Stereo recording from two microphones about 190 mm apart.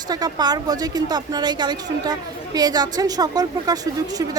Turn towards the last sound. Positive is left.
turn(degrees=-20)  # may be behind; listen again after turning